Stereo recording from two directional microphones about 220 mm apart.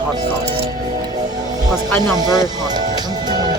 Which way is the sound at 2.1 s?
15° right (ahead or behind).